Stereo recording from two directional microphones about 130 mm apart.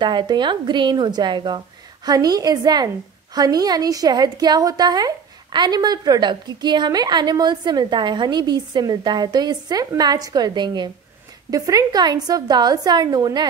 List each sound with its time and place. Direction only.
0.0 s a woman's voice: 35° right (ahead or behind)